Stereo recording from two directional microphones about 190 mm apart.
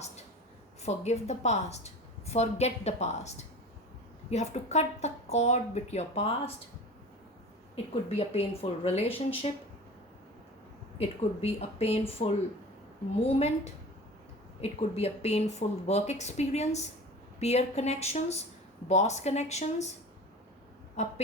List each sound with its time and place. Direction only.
0.8 s a woman's voice: 35° left (ahead or behind)
8.1 s a woman's voice: 30° left (ahead or behind)
10.9 s a woman's voice: 30° left (ahead or behind)
14.6 s a woman's voice: 30° left (ahead or behind)
21.0 s a woman's voice: 35° left (ahead or behind)